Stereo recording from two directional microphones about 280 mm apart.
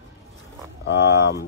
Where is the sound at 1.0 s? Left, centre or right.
Centre.